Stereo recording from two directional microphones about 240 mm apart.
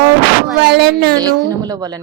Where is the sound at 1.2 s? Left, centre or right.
Centre.